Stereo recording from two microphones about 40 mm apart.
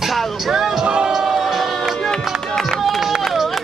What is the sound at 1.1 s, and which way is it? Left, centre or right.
Music, centre.